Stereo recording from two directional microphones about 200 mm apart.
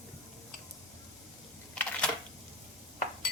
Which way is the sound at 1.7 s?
5° left (ahead or behind).